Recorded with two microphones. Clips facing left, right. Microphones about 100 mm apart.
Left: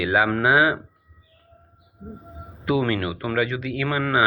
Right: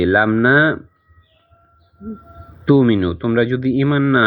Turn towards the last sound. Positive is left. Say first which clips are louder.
# right 10 dB
turn(degrees=-25)  # may be behind; listen again after turning